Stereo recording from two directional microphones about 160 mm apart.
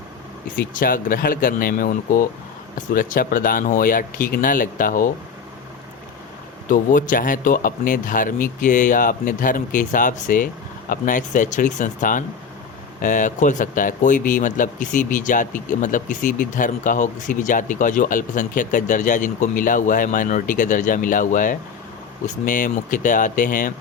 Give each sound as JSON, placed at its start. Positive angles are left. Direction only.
{"t": 0.6, "sound": "speech", "side_deg": 60}
{"t": 6.7, "sound": "speech", "side_deg": 55}